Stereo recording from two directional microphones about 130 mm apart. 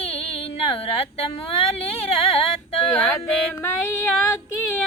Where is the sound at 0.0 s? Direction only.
50° left (ahead or behind).